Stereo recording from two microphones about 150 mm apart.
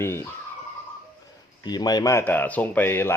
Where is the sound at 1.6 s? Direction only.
30° left (ahead or behind).